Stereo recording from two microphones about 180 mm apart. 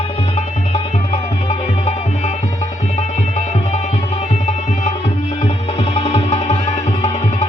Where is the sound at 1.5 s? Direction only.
35° left (ahead or behind).